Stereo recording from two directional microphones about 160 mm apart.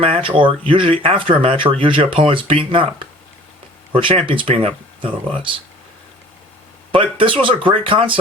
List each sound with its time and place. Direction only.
0.0 s speech: 35° right (ahead or behind)
3.9 s speech: 35° right (ahead or behind)
6.9 s speech: 35° right (ahead or behind)